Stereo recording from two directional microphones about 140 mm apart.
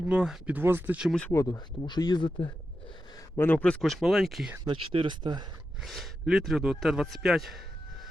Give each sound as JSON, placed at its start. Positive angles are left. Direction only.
{"t": 0.0, "sound": "speech", "side_deg": -5}
{"t": 1.3, "sound": "speech", "side_deg": 25}
{"t": 3.3, "sound": "a man's voice", "side_deg": 15}
{"t": 4.6, "sound": "speech", "side_deg": -40}
{"t": 5.8, "sound": "a man's voice", "side_deg": 0}